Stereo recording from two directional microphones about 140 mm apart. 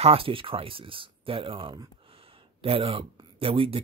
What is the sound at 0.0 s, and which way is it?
Speech, 40° right (ahead or behind).